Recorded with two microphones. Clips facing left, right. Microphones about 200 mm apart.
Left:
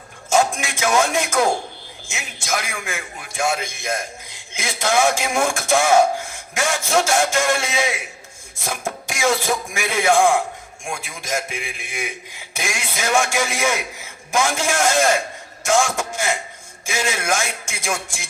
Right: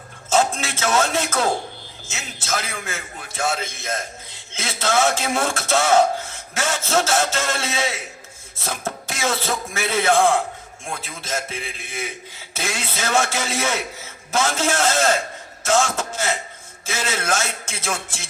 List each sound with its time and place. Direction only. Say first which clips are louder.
0.3 s a man's voice: left 1 dB; 15° left (ahead or behind)